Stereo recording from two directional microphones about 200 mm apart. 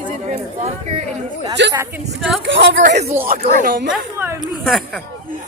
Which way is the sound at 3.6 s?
45° right (ahead or behind).